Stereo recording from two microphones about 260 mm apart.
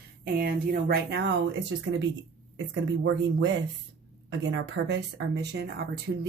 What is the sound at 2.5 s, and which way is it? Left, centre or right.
Speech, right.